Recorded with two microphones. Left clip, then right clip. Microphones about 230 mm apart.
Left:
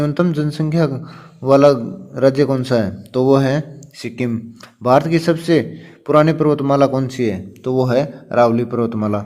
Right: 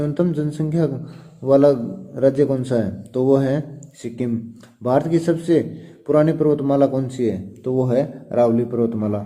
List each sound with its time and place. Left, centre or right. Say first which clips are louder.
0.0 s a man's voice: left 3 dB; left